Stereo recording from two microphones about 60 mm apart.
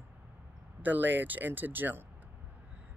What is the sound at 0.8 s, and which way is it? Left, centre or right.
Speech, right.